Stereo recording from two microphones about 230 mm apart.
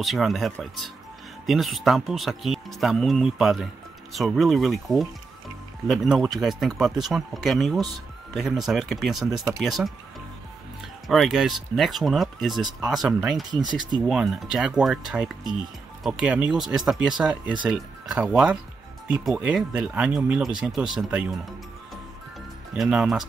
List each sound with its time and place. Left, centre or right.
0.0 s speech: centre
11.1 s speech: centre
13.5 s speech: centre
14.0 s speech: centre
22.8 s speech: centre